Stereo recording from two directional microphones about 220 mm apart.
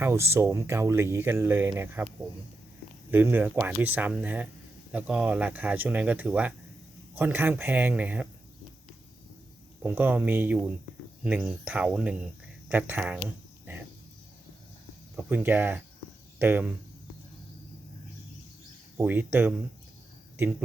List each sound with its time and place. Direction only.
0.0 s speech: 10° right (ahead or behind)
3.1 s speech: 10° right (ahead or behind)
9.8 s speech: 10° right (ahead or behind)
12.6 s cricket: 5° right (ahead or behind)
15.1 s speech: 5° right (ahead or behind)
18.9 s speech: 10° right (ahead or behind)